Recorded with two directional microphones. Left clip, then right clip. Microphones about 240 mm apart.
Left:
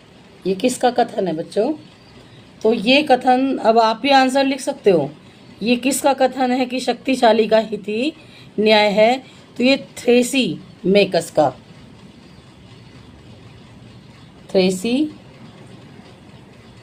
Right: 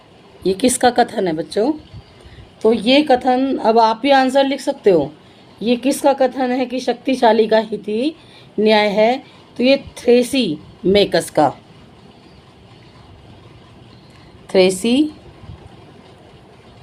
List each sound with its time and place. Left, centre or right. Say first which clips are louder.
0.4 s a woman's voice: right 3 dB; right
14.4 s a woman's voice: right 4 dB; right